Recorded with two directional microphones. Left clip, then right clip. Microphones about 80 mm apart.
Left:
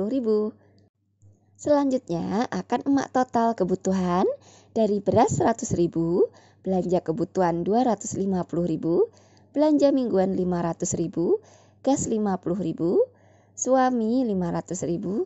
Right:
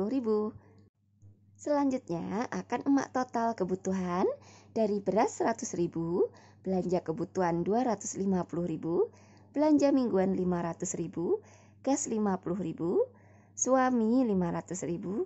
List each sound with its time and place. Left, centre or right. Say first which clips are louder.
0.0 s speech: left 6 dB; left
1.6 s a woman's voice: left 8 dB; left
2.0 s a woman's voice: left 8 dB; left
2.9 s speech: left 6 dB; left
3.9 s speech: left 6 dB; left
4.5 s a woman's voice: left 7 dB; left
5.6 s speech: left 9 dB; left
6.0 s a sound: left 7 dB; left
6.7 s a woman's voice: left 7 dB; left
13.6 s a woman's voice: left 6 dB; left
13.9 s a woman's voice: left 4 dB; right
14.2 s a woman's voice: left 4 dB; left